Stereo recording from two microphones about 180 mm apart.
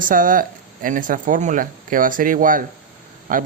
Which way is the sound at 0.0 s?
50° right (ahead or behind).